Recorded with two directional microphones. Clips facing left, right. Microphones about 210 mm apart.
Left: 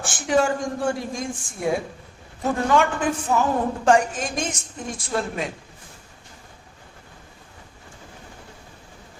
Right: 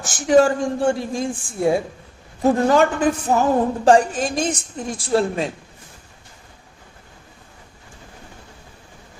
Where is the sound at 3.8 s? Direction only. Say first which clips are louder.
Right 4 dB; 35° right (ahead or behind).